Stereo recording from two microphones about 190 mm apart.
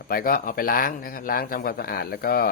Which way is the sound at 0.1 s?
50° left (ahead or behind).